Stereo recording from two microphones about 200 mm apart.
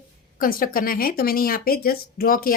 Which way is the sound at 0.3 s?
45° left (ahead or behind).